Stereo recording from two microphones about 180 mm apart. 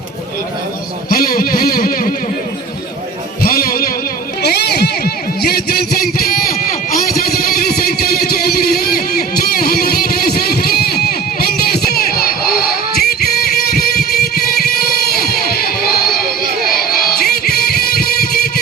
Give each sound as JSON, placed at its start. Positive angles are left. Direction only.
{"t": 1.1, "sound": "a sound", "side_deg": 55}
{"t": 3.4, "sound": "music", "side_deg": 55}
{"t": 14.6, "sound": "crowd", "side_deg": 55}